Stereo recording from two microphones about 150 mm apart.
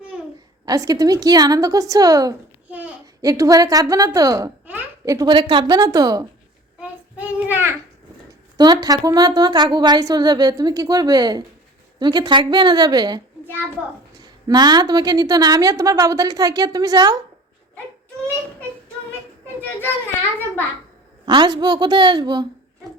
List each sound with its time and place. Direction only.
0.6 s a woman's voice: 25° right (ahead or behind)
2.6 s babbling: 10° right (ahead or behind)
3.2 s a child's voice: 20° right (ahead or behind)
5.1 s a woman's voice: 30° right (ahead or behind)
6.7 s child singing: 10° right (ahead or behind)
8.5 s a woman's voice: 30° right (ahead or behind)
21.2 s a woman's voice: 30° right (ahead or behind)